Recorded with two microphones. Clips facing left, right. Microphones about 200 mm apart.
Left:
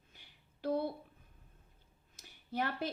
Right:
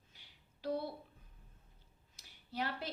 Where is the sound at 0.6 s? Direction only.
50° left (ahead or behind).